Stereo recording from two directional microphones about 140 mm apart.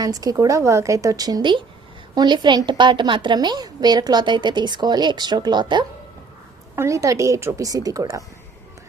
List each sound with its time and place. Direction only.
0.0 s a woman's voice: 25° right (ahead or behind)